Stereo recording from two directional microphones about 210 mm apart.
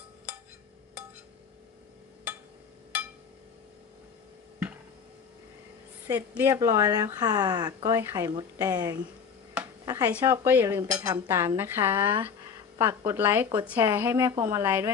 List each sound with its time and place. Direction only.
6.0 s speech: 10° right (ahead or behind)